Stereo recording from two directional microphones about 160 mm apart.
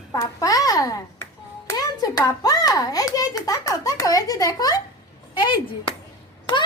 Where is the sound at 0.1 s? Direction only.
20° left (ahead or behind).